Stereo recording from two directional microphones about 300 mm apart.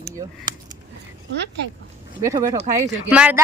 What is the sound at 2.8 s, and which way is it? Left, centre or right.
Speech, centre.